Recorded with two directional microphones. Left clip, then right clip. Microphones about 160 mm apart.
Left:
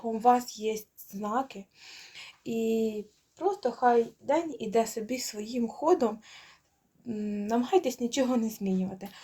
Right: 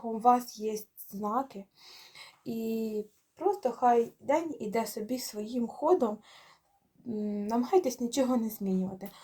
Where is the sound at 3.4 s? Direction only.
5° left (ahead or behind).